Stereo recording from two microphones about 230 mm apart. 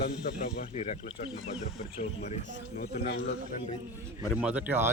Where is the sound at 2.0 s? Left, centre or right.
Left.